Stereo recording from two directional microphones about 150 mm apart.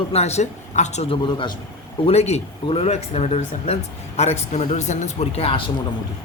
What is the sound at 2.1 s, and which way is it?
A man's voice, 45° left (ahead or behind).